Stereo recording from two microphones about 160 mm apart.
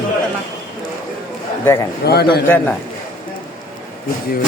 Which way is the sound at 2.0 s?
85° left.